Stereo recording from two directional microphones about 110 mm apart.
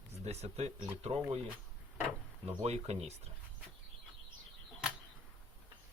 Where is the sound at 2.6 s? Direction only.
80° right.